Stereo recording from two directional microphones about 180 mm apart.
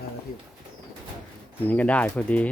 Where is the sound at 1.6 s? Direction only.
10° left (ahead or behind).